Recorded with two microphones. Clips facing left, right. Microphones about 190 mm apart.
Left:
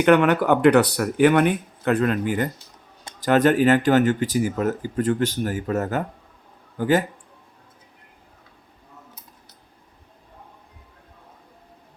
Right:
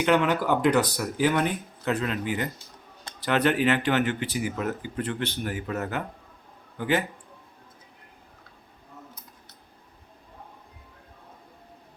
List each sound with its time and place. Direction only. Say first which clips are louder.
0.0 s speech: left 6 dB; 60° left (ahead or behind)